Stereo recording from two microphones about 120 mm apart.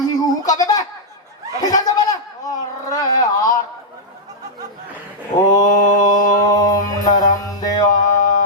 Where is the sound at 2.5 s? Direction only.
30° left (ahead or behind).